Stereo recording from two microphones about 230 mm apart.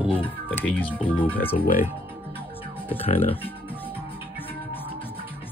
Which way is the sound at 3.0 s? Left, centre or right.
Left.